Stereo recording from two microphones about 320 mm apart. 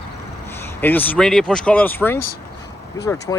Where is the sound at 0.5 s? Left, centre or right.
Centre.